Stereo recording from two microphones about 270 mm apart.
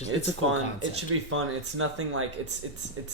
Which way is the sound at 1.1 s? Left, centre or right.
Right.